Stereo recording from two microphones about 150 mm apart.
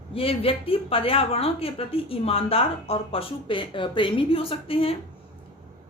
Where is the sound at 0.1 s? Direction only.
40° left (ahead or behind).